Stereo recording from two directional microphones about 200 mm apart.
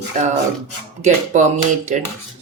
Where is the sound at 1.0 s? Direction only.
35° right (ahead or behind).